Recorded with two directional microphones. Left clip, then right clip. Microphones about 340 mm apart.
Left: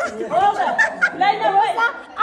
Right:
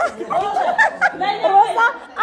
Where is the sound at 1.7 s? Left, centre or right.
Right.